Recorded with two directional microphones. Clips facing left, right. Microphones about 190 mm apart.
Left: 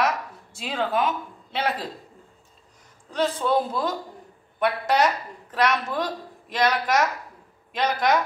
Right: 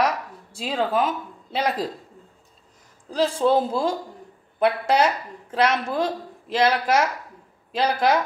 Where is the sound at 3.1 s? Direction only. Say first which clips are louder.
Right 3 dB; 30° right (ahead or behind).